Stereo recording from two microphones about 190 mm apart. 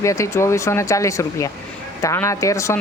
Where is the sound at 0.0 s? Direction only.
15° left (ahead or behind).